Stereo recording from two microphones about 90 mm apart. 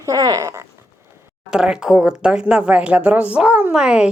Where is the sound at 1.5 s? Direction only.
10° right (ahead or behind).